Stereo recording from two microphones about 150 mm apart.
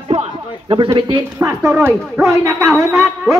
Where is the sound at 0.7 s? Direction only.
30° right (ahead or behind).